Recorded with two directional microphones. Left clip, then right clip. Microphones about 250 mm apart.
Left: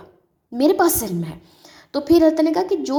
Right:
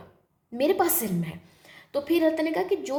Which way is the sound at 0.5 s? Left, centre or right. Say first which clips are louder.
Left 7 dB; left.